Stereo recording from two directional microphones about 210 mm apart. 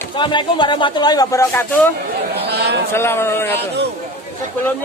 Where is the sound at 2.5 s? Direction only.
50° right (ahead or behind).